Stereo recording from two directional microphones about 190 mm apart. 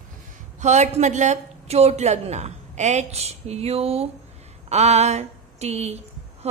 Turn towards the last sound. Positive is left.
turn(degrees=-35)  # may be behind; listen again after turning